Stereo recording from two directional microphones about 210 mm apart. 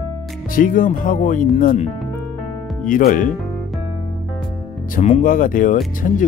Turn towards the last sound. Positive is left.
turn(degrees=40)  # may be behind; listen again after turning